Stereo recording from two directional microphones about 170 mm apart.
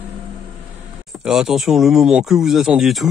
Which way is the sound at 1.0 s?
Centre (ahead or behind).